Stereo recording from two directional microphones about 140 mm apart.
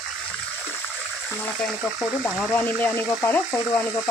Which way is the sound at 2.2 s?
15° left (ahead or behind).